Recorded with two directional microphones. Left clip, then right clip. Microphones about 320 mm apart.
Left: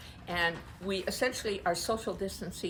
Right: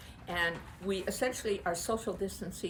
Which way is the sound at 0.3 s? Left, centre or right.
Centre.